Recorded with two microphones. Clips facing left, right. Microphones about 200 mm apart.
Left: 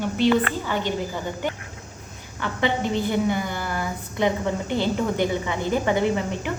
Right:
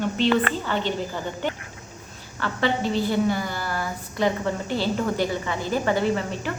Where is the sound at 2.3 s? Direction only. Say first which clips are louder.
Even; 15° left (ahead or behind).